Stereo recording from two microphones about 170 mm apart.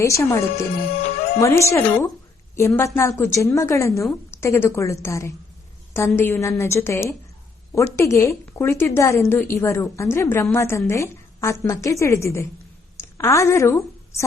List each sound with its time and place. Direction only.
0.0 s a woman's voice: 15° left (ahead or behind)
0.5 s speech: 45° left (ahead or behind)
1.4 s a woman's voice: 15° left (ahead or behind)